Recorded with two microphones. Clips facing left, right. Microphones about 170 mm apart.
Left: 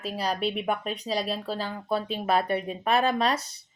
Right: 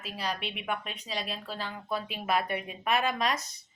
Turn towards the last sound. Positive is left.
turn(degrees=30)  # may be behind; listen again after turning